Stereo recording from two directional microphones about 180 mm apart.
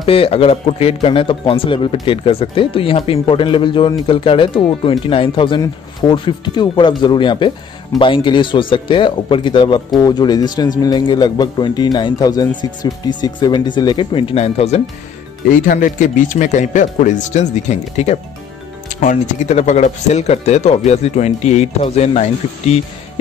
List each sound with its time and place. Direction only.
0.0 s speech: 30° left (ahead or behind)
15.6 s speech: 50° left (ahead or behind)